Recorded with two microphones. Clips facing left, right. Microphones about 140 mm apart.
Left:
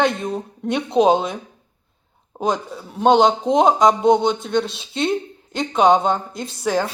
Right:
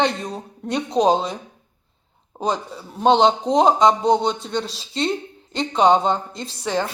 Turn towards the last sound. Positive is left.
turn(degrees=5)  # may be behind; listen again after turning